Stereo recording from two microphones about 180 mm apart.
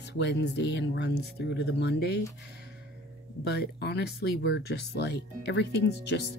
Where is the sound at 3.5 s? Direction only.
65° left (ahead or behind).